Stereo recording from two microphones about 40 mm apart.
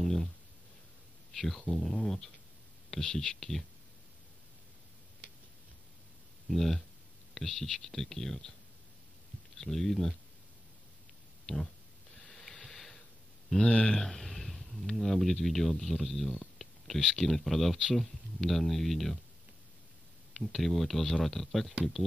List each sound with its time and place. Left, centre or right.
0.0 s a sound: centre
1.3 s speech: centre
6.5 s speech: centre
9.6 s speech: centre
11.4 s speech: centre
12.2 s a sound: centre
13.6 s speech: left
14.0 s a sound: centre
15.0 s speech: centre
20.3 s speech: centre